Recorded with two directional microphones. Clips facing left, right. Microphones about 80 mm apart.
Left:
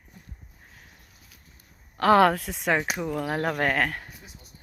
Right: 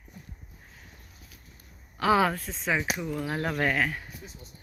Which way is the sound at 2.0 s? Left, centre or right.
Left.